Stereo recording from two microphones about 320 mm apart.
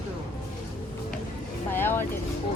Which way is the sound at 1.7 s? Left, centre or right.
Centre.